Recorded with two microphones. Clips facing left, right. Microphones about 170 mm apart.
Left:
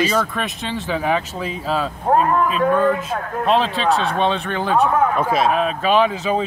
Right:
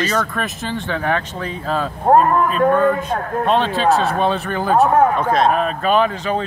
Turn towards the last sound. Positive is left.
turn(degrees=0)  # may be behind; listen again after turning